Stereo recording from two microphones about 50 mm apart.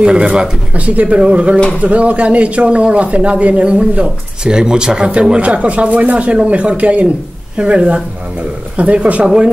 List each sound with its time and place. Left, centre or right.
0.0 s speech: centre